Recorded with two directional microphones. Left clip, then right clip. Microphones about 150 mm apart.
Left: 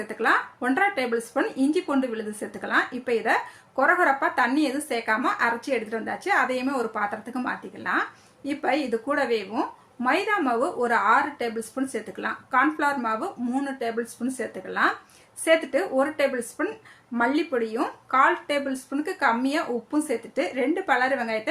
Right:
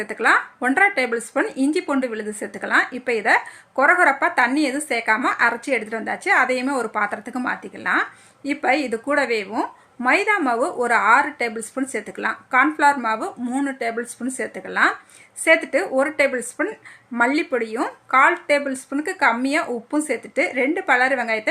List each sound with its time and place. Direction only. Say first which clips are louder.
0.1 s speech: right 5 dB; 30° right (ahead or behind)